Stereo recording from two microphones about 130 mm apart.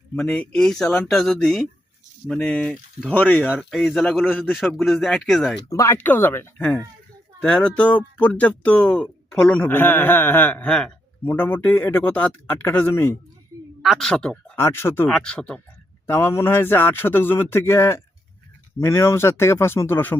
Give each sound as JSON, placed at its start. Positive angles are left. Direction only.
{"t": 0.2, "sound": "speech", "side_deg": 5}
{"t": 3.5, "sound": "speech", "side_deg": 0}
{"t": 5.6, "sound": "speech", "side_deg": 25}
{"t": 13.8, "sound": "speech", "side_deg": 0}
{"t": 14.5, "sound": "speech", "side_deg": 20}
{"t": 15.1, "sound": "speech", "side_deg": 5}
{"t": 16.0, "sound": "speech", "side_deg": 20}